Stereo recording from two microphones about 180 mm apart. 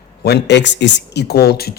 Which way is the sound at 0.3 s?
70° left (ahead or behind).